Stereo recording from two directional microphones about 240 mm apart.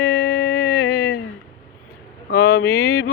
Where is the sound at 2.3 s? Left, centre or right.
Left.